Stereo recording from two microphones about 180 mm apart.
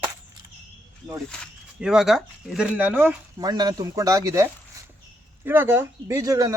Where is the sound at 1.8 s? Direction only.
5° right (ahead or behind).